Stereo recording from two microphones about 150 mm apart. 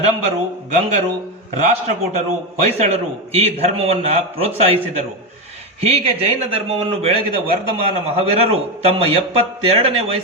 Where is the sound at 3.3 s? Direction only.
40° right (ahead or behind).